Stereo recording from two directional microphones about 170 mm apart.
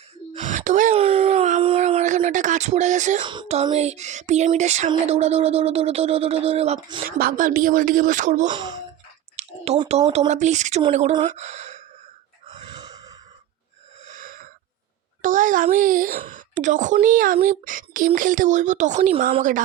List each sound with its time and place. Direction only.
0.3 s gasp: 45° right (ahead or behind)
0.9 s a sound: 30° right (ahead or behind)
3.2 s a sound: 30° right (ahead or behind)
7.0 s a woman's voice: 60° right (ahead or behind)
8.4 s speech: 25° right (ahead or behind)
9.3 s clicking: 40° right (ahead or behind)
10.1 s a woman's voice: 40° right (ahead or behind)
11.3 s sigh: 45° right (ahead or behind)
12.5 s a sound: 25° right (ahead or behind)
14.0 s wheeze: 50° right (ahead or behind)
15.2 s a woman's voice: 50° right (ahead or behind)